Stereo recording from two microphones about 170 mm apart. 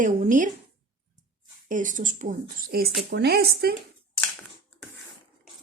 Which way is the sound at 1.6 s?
50° right (ahead or behind).